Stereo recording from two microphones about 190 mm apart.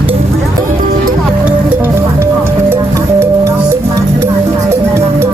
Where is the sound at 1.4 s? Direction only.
10° right (ahead or behind).